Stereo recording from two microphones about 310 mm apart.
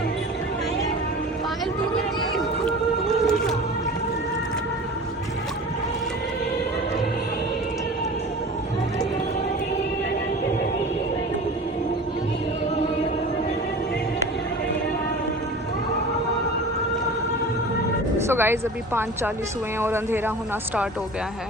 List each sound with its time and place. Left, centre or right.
2.3 s music: centre
18.2 s speech: centre